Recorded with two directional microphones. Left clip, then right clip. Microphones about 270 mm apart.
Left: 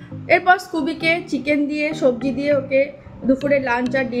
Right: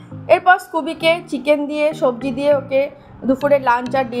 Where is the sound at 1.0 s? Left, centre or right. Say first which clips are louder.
Right 4 dB; centre.